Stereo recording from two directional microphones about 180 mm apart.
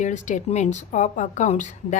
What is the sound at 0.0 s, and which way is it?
A woman's voice, 40° left (ahead or behind).